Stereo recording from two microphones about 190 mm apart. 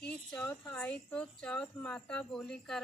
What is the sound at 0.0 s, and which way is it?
Speech, 5° left (ahead or behind).